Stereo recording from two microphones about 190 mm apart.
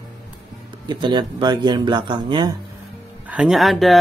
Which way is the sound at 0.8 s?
25° right (ahead or behind).